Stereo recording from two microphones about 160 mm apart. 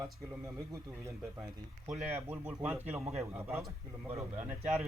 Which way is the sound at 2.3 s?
10° right (ahead or behind).